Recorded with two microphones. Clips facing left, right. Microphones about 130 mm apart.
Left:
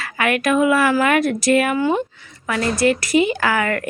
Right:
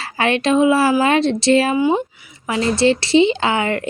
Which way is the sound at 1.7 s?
15° right (ahead or behind).